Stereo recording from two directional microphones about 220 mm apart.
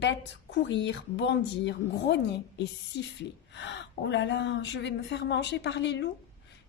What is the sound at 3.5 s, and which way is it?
A woman's voice, 55° left (ahead or behind).